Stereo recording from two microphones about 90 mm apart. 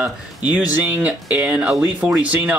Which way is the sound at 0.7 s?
20° right (ahead or behind).